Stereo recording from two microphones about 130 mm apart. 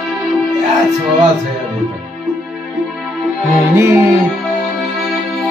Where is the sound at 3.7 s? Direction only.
20° right (ahead or behind).